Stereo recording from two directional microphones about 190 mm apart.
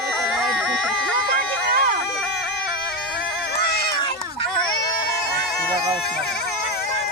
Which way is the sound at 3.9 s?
25° left (ahead or behind).